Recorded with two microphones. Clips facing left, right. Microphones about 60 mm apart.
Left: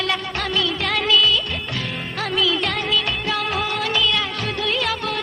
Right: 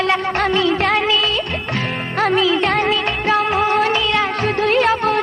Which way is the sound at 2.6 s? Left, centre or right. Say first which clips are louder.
Right 6 dB; right.